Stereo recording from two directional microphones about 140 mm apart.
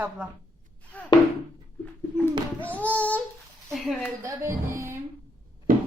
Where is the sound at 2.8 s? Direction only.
10° left (ahead or behind).